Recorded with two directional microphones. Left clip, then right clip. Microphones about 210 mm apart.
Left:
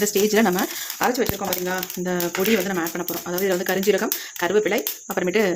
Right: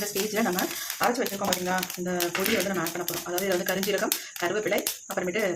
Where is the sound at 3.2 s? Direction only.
50° left (ahead or behind).